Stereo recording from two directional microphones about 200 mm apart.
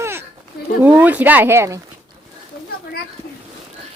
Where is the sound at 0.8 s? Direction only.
10° right (ahead or behind).